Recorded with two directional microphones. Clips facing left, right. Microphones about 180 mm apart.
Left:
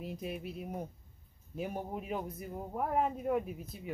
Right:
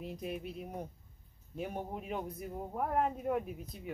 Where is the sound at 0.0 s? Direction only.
5° left (ahead or behind).